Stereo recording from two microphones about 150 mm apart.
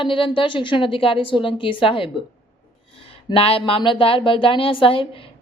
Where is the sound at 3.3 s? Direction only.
40° left (ahead or behind).